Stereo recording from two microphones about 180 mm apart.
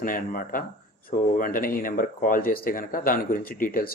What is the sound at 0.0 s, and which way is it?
Speech, 50° left (ahead or behind).